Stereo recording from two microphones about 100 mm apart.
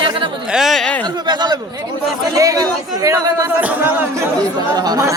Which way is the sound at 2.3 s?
35° right (ahead or behind).